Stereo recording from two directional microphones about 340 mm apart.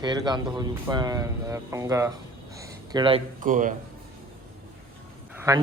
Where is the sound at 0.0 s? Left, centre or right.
Centre.